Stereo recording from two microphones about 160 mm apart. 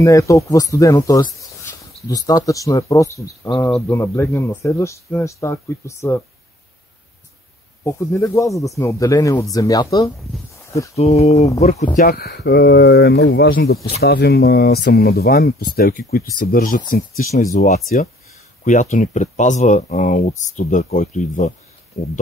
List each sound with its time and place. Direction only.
0.0 s speech: 20° left (ahead or behind)
7.8 s speech: 15° left (ahead or behind)
11.0 s speech: 40° left (ahead or behind)
12.0 s speech: 80° left; by 16.8 s 60° left (ahead or behind)
17.4 s speech: 50° left (ahead or behind)